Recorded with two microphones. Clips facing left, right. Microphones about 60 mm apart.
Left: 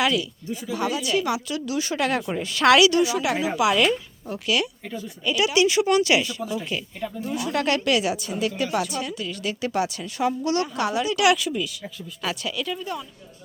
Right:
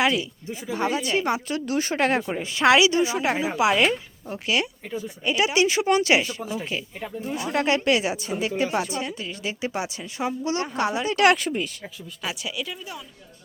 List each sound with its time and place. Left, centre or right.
0.0 s speech: right
12.2 s speech: centre